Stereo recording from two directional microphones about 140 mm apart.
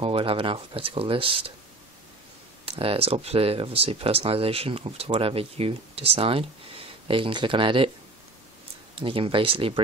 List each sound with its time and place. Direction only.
0.0 s speech: 40° right (ahead or behind)
2.6 s speech: 40° right (ahead or behind)
8.9 s speech: 40° right (ahead or behind)